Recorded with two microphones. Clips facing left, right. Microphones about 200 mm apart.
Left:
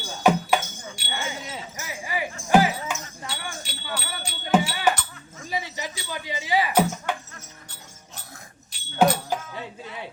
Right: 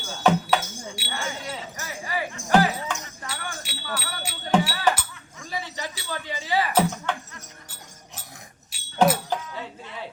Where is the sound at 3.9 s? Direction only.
5° right (ahead or behind).